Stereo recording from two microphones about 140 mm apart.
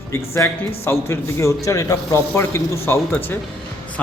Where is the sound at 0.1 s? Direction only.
20° left (ahead or behind).